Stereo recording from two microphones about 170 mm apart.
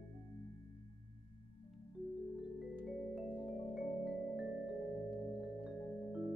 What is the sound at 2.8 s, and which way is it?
Music, centre (ahead or behind).